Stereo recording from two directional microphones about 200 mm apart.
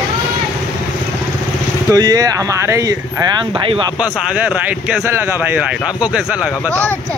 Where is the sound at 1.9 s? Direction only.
20° right (ahead or behind).